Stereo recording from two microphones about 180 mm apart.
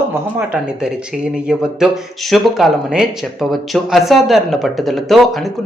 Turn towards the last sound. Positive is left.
turn(degrees=0)  # may be behind; listen again after turning